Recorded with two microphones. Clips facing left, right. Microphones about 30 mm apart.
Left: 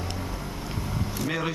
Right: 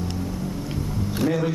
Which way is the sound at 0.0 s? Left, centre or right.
Left.